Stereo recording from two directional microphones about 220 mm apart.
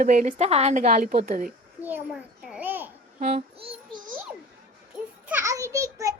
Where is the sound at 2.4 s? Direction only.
5° right (ahead or behind).